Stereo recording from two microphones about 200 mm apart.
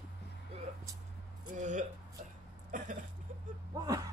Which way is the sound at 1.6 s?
40° right (ahead or behind).